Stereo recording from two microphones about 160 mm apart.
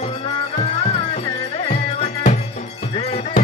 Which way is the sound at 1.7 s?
40° left (ahead or behind).